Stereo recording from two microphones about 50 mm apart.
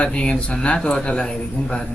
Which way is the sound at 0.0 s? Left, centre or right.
Left.